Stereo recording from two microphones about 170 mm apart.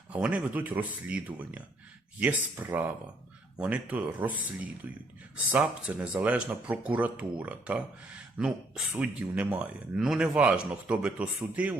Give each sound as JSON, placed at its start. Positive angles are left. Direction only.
{"t": 0.1, "sound": "speech", "side_deg": -10}
{"t": 5.5, "sound": "speech", "side_deg": -10}